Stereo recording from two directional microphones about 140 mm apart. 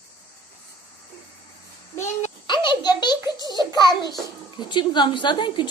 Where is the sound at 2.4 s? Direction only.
35° left (ahead or behind).